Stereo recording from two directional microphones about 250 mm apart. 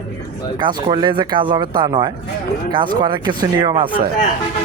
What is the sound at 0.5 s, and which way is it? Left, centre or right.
Speech, centre.